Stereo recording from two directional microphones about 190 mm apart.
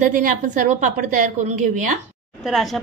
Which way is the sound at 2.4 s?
Centre (ahead or behind).